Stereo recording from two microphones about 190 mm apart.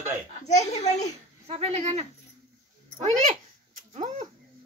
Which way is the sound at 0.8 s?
35° left (ahead or behind).